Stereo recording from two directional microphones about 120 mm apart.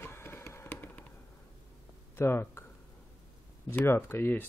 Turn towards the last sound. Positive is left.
turn(degrees=20)  # may be behind; listen again after turning